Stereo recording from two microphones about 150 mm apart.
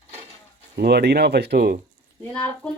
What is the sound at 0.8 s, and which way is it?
Speech, 90° right.